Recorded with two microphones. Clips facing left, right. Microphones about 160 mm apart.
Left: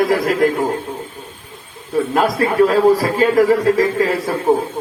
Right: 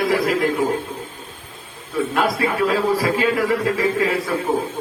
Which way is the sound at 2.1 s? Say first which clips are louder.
Left 6 dB; 40° left (ahead or behind).